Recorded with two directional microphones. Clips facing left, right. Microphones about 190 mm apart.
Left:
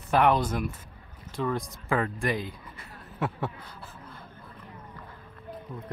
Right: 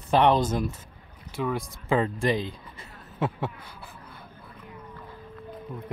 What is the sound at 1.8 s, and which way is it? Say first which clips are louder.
Speech: right 4 dB; 25° right (ahead or behind).